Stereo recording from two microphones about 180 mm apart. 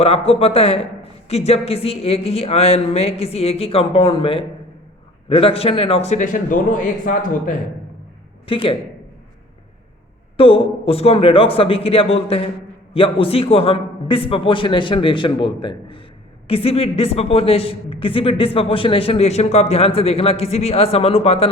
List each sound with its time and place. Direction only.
0.0 s a man's voice: 35° left (ahead or behind)
8.4 s a man's voice: 30° left (ahead or behind)
10.3 s a man's voice: 30° left (ahead or behind)